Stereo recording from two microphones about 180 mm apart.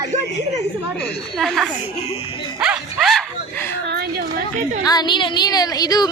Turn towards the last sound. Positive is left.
turn(degrees=20)  # may be behind; listen again after turning